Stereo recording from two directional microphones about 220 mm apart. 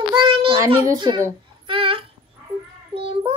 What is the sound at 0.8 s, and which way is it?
Speech, 20° right (ahead or behind).